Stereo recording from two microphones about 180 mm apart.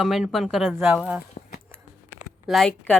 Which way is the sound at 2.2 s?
Centre (ahead or behind).